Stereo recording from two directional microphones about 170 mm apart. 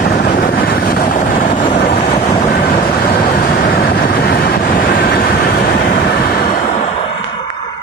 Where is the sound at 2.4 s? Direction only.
65° left (ahead or behind).